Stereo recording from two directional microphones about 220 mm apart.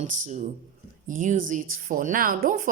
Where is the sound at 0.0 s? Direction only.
35° right (ahead or behind).